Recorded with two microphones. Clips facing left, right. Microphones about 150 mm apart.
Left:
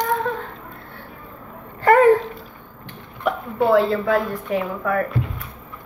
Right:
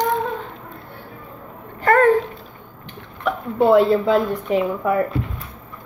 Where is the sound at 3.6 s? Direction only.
20° right (ahead or behind).